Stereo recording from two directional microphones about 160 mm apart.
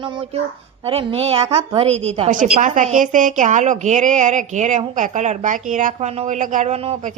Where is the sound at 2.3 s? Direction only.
55° right (ahead or behind).